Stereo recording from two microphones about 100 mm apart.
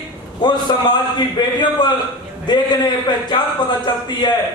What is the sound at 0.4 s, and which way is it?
A man's voice, 50° left (ahead or behind).